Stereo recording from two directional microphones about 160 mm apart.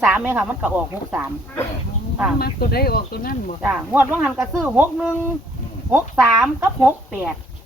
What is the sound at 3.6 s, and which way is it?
Speech, 10° right (ahead or behind).